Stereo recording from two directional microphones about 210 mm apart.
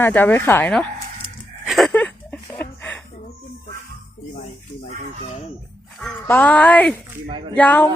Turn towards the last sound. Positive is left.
turn(degrees=5)  # may be behind; listen again after turning